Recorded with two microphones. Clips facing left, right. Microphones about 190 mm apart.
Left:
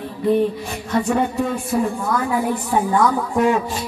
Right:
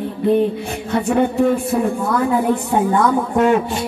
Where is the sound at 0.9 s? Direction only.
60° right (ahead or behind).